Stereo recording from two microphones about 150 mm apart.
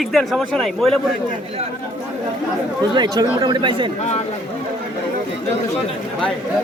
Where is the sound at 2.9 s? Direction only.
30° right (ahead or behind).